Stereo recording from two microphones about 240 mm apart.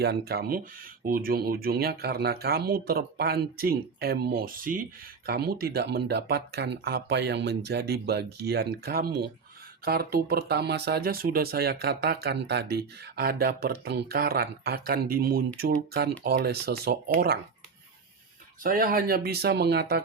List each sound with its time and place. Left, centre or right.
0.0 s speech: right
18.6 s speech: right